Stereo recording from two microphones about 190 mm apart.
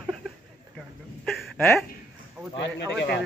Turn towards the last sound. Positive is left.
turn(degrees=60)  # may be behind; listen again after turning